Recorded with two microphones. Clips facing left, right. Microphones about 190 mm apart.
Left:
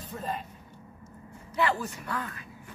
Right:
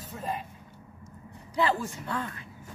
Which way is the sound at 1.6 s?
25° right (ahead or behind).